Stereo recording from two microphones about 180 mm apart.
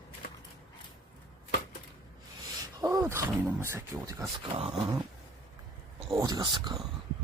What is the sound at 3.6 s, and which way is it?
Speech, 15° right (ahead or behind).